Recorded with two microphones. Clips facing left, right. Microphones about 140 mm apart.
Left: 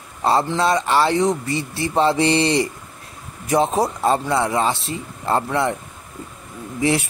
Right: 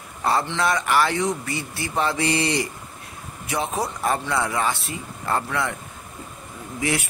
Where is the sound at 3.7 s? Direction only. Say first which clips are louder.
Left 6 dB; 25° left (ahead or behind).